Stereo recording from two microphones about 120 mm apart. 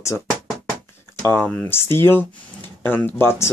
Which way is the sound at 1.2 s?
15° left (ahead or behind).